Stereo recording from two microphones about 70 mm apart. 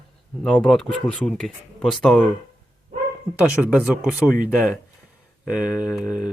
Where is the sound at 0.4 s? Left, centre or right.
Centre.